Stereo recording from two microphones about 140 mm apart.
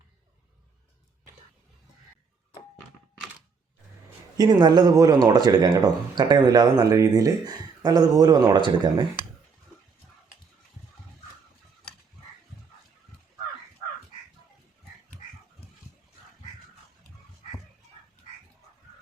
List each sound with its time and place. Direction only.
4.4 s speech: 30° right (ahead or behind)